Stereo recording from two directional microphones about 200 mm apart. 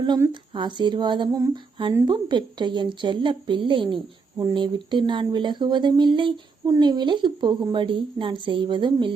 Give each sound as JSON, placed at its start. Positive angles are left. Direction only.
{"t": 0.0, "sound": "speech", "side_deg": -20}